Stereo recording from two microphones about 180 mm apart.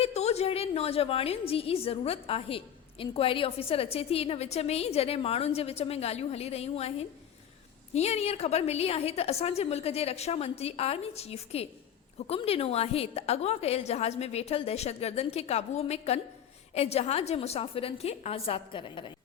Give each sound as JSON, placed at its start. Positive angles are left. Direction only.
{"t": 0.0, "sound": "a woman's voice", "side_deg": 35}
{"t": 7.9, "sound": "a woman's voice", "side_deg": 35}